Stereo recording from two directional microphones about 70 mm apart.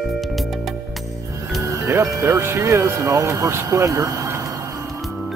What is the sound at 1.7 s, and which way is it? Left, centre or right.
Speech, right.